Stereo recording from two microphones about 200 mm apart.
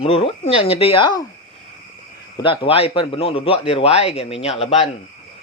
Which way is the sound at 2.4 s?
25° left (ahead or behind).